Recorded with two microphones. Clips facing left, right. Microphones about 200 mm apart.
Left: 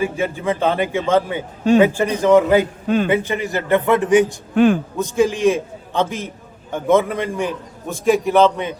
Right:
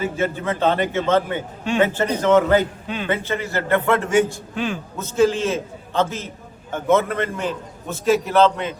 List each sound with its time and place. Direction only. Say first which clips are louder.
0.0 s a man's voice: left 2 dB; 10° left (ahead or behind)
2.8 s a man's voice: left 10 dB; 45° left (ahead or behind)
3.1 s a man's voice: left 4 dB; 15° left (ahead or behind)
4.5 s a man's voice: left 12 dB; 55° left (ahead or behind)
4.9 s a man's voice: left 1 dB; 15° left (ahead or behind)